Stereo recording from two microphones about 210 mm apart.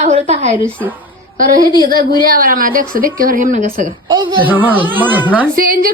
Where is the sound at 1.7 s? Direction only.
20° left (ahead or behind).